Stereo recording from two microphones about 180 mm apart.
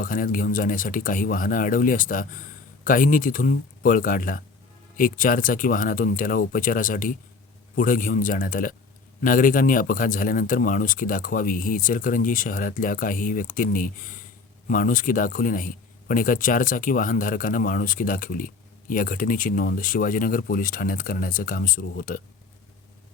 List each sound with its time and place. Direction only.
0.0 s a man's voice: 50° left (ahead or behind)